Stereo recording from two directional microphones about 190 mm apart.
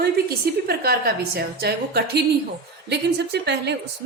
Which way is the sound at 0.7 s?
55° right (ahead or behind).